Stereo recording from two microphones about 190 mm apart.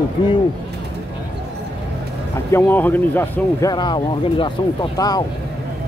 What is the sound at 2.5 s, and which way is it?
Speech, 10° left (ahead or behind).